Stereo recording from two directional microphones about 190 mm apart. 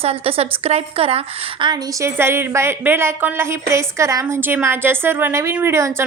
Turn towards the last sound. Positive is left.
turn(degrees=-15)  # may be behind; listen again after turning